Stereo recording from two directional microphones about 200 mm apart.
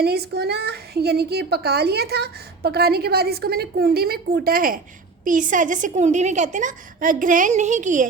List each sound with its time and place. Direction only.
0.0 s a child's voice: 55° right (ahead or behind)